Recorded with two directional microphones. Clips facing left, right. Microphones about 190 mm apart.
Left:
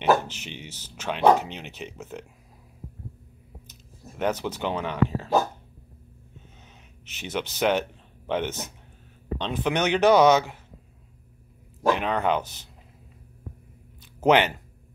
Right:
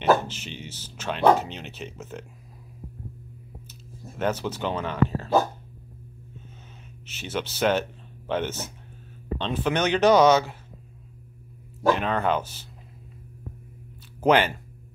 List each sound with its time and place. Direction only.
0.0 s speech: 15° left (ahead or behind)
4.2 s speech: 15° left (ahead or behind)
7.1 s speech: 15° left (ahead or behind)
11.8 s speech: 15° left (ahead or behind)
14.2 s speech: 20° left (ahead or behind)